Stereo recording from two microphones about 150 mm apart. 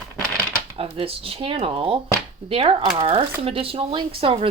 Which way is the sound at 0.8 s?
40° right (ahead or behind).